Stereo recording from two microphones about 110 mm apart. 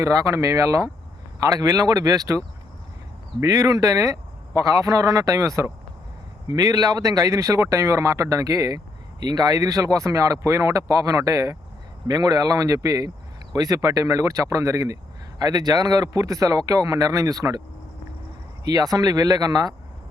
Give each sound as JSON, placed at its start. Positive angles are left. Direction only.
{"t": 0.0, "sound": "speech", "side_deg": -30}
{"t": 3.4, "sound": "speech", "side_deg": -35}
{"t": 18.6, "sound": "speech", "side_deg": -35}